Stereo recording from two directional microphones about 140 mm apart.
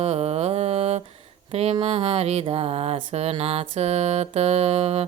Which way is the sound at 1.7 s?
45° right (ahead or behind).